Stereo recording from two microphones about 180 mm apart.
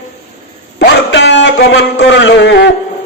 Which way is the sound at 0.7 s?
85° left.